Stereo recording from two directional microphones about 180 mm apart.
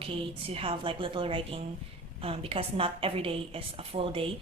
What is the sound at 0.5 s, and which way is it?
A woman's voice, 30° right (ahead or behind).